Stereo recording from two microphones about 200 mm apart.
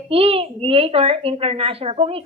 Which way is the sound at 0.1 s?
30° right (ahead or behind).